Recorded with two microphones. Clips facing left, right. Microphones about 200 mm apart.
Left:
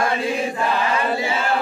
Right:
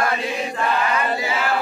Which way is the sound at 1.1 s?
25° left (ahead or behind).